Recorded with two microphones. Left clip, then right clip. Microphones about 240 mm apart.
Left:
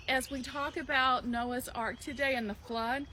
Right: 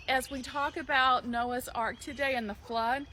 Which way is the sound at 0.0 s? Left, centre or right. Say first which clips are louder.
Right 2 dB; centre.